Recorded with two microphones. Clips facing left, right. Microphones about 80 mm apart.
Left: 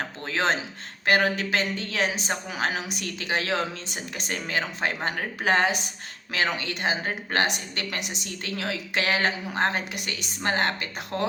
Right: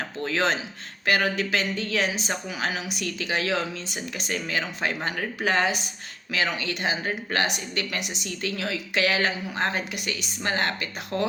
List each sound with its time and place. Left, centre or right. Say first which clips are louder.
0.2 s a woman's voice: right 1 dB; left